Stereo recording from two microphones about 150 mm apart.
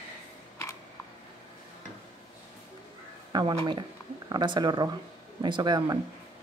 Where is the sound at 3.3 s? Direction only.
30° right (ahead or behind).